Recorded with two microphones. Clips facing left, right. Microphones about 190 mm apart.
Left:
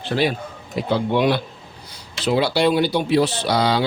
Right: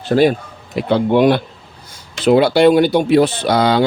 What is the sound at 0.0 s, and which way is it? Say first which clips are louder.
Speech: right 8 dB; 45° right (ahead or behind).